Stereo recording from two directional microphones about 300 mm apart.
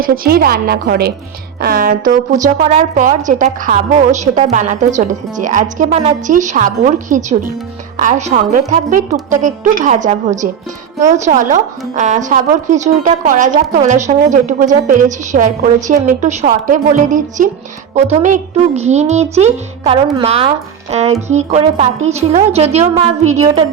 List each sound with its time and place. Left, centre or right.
0.0 s a woman's voice: right